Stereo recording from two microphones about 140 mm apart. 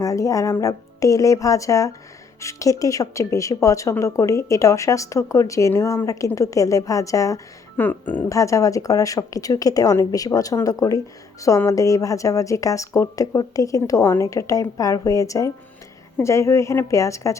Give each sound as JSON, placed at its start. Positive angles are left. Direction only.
{"t": 0.0, "sound": "a woman's voice", "side_deg": 25}
{"t": 7.8, "sound": "speech", "side_deg": 10}
{"t": 8.3, "sound": "a woman's voice", "side_deg": 20}